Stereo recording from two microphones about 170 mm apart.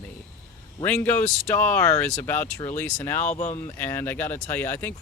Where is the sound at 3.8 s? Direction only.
10° left (ahead or behind).